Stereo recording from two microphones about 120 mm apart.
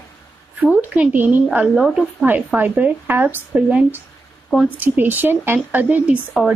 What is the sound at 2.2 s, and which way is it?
Speech, 15° right (ahead or behind).